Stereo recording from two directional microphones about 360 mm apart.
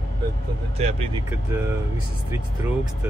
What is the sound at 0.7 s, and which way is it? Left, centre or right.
Speech, centre.